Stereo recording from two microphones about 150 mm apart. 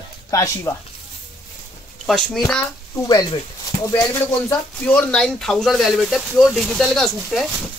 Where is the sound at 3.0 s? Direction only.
25° left (ahead or behind).